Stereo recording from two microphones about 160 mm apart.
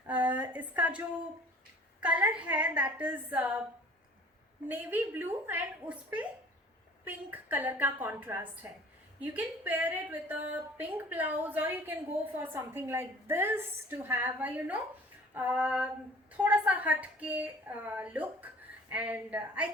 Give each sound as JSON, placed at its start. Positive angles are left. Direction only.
{"t": 0.1, "sound": "a sound", "side_deg": -10}
{"t": 2.0, "sound": "a woman's voice", "side_deg": -10}
{"t": 4.7, "sound": "a woman's voice", "side_deg": -10}